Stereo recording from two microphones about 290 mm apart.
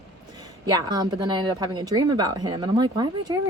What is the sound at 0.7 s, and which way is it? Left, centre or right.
A woman's voice, centre.